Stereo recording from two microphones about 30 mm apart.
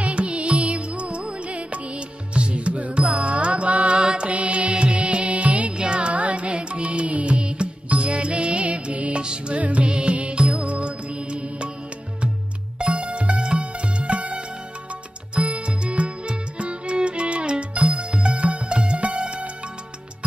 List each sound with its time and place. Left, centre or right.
0.0 s music: right
4.0 s mantra: right
4.3 s music: right
5.8 s music: right
9.2 s music: right
9.6 s music: right
9.8 s music: right
12.7 s music: right